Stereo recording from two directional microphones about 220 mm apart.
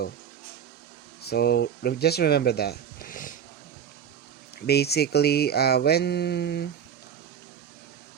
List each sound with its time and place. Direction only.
1.2 s speech: 45° left (ahead or behind)
4.6 s speech: 45° left (ahead or behind)